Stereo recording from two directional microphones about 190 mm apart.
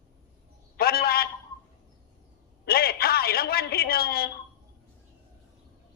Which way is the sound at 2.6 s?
55° left (ahead or behind).